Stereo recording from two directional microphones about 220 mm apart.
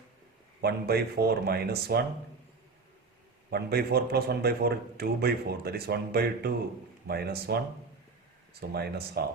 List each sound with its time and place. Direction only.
0.6 s a man's voice: 45° right (ahead or behind)
3.5 s a man's voice: 45° right (ahead or behind)
8.7 s a man's voice: 45° right (ahead or behind)